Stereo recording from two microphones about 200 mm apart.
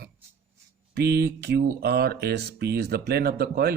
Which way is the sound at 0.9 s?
55° right (ahead or behind).